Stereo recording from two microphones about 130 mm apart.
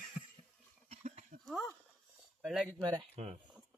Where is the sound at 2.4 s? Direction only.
5° right (ahead or behind).